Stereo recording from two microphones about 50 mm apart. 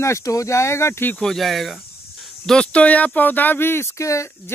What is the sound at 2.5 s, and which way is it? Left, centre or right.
Speech, left.